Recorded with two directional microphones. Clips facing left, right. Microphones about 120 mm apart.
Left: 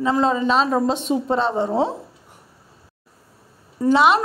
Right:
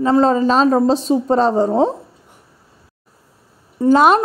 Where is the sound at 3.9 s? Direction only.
45° right (ahead or behind).